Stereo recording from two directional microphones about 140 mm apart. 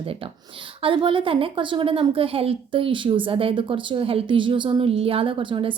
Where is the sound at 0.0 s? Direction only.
40° right (ahead or behind).